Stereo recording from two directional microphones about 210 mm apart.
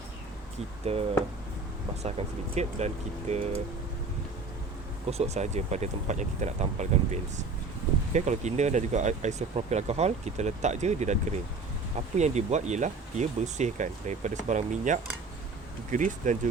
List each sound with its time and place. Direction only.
0.9 s speech: 30° right (ahead or behind)
5.1 s speech: 30° right (ahead or behind)